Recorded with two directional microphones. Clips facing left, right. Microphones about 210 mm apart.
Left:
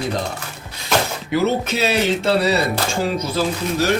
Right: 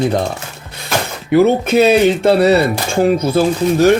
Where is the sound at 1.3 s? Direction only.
55° right (ahead or behind).